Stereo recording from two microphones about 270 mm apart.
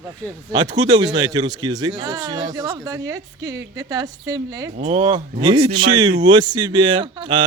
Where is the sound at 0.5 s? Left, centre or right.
Centre.